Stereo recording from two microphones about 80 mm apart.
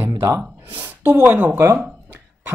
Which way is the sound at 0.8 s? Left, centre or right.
Right.